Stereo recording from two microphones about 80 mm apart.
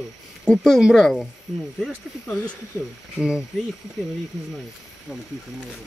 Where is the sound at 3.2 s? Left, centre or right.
Centre.